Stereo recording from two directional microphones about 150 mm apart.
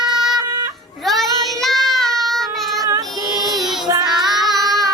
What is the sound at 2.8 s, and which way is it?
Child singing, 25° right (ahead or behind).